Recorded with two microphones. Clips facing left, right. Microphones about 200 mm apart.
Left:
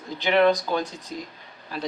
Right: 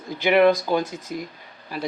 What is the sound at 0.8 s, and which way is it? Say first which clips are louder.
Speech: right 3 dB; 15° left (ahead or behind).